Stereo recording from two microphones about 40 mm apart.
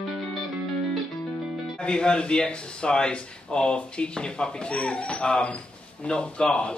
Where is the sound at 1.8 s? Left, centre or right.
Left.